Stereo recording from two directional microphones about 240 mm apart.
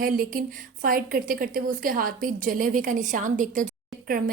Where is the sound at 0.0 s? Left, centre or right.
Right.